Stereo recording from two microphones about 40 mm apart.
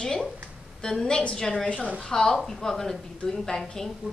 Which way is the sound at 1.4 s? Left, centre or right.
Centre.